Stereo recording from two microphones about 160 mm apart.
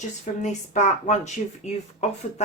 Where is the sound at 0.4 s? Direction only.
50° left (ahead or behind).